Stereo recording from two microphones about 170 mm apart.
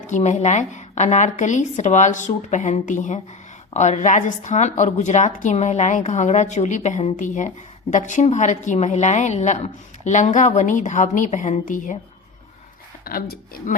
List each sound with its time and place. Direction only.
0.1 s a woman's voice: 45° left (ahead or behind)
13.1 s speech: 65° left (ahead or behind)